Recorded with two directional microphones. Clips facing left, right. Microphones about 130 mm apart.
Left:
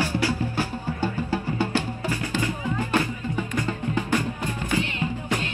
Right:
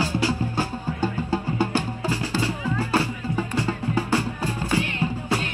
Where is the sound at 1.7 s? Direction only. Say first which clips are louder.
Right 1 dB; 35° right (ahead or behind).